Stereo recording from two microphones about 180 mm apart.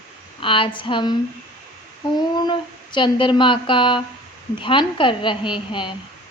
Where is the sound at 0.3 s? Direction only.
30° left (ahead or behind).